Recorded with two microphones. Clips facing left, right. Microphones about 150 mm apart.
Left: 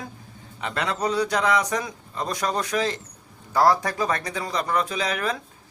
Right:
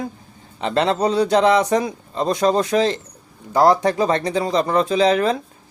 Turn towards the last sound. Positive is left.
turn(degrees=-25)  # may be behind; listen again after turning